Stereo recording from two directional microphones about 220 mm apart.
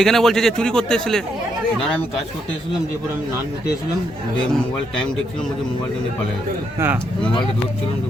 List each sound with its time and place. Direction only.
0.0 s a man's voice: centre (ahead or behind)
6.7 s speech: 10° right (ahead or behind)